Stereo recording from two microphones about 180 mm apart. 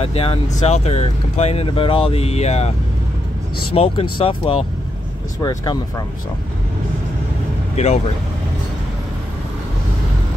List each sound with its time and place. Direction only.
0.0 s speech: 30° left (ahead or behind)
3.7 s speech: 30° left (ahead or behind)
7.7 s speech: 35° left (ahead or behind)